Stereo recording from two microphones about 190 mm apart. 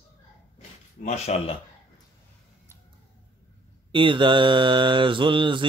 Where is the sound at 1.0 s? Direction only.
35° left (ahead or behind).